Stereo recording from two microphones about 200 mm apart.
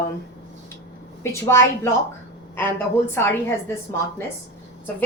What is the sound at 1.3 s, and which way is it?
A woman's voice, 15° left (ahead or behind).